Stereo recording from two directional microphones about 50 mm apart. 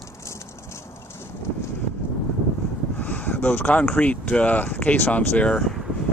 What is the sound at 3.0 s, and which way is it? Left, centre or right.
Speech, left.